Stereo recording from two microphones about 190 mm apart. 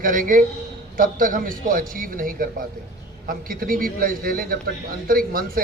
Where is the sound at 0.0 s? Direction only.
45° right (ahead or behind).